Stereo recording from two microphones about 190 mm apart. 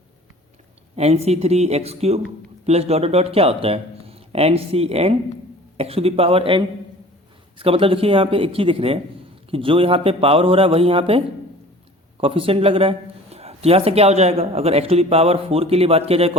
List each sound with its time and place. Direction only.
0.9 s a man's voice: 35° right (ahead or behind)